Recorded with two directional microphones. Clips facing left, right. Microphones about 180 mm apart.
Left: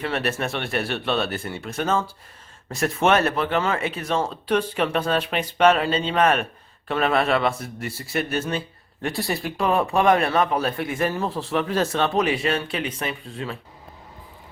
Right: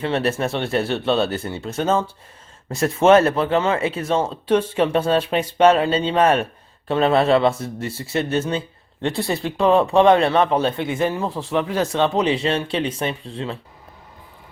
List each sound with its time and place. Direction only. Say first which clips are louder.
0.0 s speech: right 4 dB; 30° right (ahead or behind)